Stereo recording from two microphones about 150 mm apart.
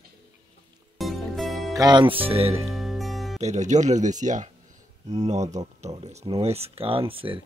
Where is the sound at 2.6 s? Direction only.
Centre (ahead or behind).